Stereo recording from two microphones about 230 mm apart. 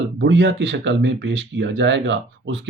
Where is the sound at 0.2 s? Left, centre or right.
Right.